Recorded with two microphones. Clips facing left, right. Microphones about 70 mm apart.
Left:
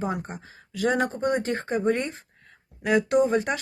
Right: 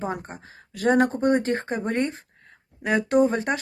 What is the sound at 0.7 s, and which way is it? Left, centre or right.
Speech, right.